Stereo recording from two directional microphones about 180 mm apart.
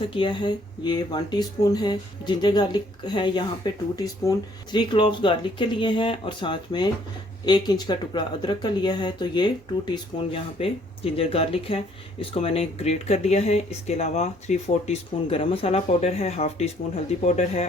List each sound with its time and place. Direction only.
0.1 s speech: 25° left (ahead or behind)